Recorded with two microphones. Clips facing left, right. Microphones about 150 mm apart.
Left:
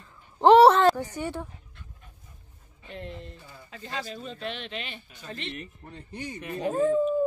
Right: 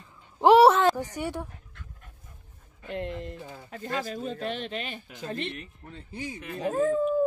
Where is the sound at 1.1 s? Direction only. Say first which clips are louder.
Even; 10° right (ahead or behind).